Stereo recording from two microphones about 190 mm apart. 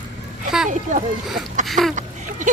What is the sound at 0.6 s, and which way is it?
Speech, 40° right (ahead or behind).